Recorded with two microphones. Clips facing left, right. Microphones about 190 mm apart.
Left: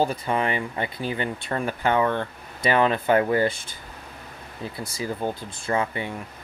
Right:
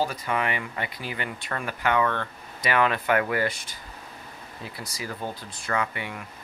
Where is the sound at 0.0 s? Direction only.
25° left (ahead or behind).